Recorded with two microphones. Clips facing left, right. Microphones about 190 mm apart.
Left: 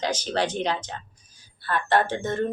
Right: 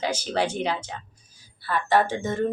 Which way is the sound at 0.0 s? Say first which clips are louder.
Even; 10° right (ahead or behind).